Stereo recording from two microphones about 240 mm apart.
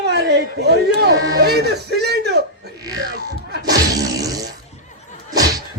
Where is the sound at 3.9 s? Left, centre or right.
Centre.